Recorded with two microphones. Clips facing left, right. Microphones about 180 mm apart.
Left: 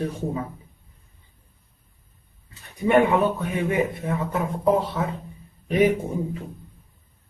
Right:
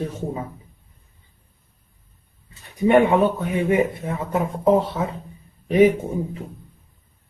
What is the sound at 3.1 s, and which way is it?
Speech, 25° right (ahead or behind).